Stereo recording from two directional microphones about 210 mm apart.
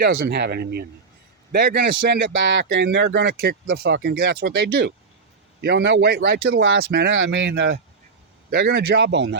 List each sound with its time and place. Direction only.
0.0 s speech: 55° right (ahead or behind)
6.8 s speech: 50° right (ahead or behind)